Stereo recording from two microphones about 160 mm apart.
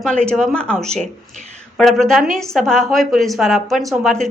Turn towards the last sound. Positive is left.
turn(degrees=5)  # may be behind; listen again after turning